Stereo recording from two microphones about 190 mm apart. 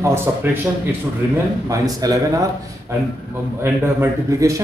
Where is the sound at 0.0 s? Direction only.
15° right (ahead or behind).